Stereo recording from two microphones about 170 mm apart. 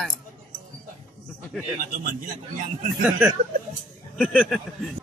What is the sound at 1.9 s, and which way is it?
Speech, 55° right (ahead or behind).